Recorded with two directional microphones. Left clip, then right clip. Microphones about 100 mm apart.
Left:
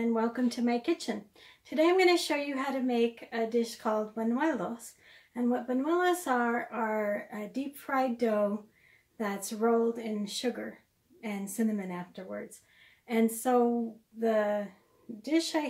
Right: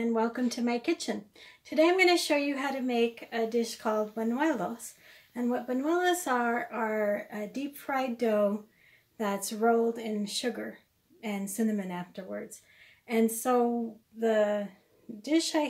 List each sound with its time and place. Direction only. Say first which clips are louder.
0.0 s speech: right 1 dB; 25° right (ahead or behind)